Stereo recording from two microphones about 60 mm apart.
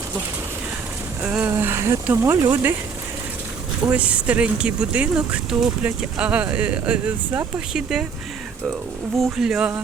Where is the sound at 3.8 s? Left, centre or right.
Right.